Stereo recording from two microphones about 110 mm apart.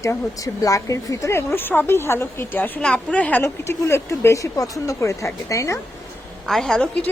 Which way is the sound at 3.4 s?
25° left (ahead or behind).